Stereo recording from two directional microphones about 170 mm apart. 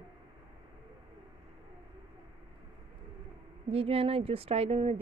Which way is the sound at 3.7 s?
35° right (ahead or behind).